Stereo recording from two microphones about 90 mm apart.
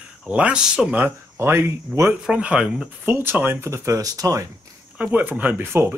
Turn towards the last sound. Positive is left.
turn(degrees=-25)  # may be behind; listen again after turning